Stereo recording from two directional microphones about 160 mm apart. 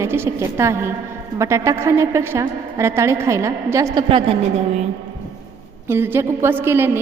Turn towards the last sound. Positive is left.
turn(degrees=-15)  # may be behind; listen again after turning